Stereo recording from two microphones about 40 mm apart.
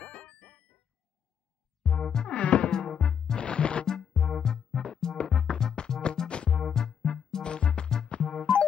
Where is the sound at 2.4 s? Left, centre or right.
Left.